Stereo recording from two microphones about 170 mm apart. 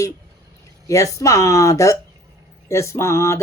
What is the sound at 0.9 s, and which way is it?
Speech, 20° left (ahead or behind).